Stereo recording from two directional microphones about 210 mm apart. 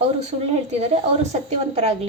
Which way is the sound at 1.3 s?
30° right (ahead or behind).